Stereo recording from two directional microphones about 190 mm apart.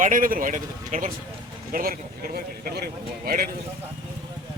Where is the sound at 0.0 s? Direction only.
45° right (ahead or behind).